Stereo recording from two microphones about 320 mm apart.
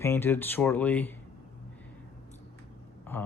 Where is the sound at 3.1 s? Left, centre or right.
Centre.